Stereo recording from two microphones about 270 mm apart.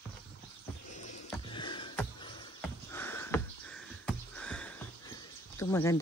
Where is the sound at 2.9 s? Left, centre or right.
Centre.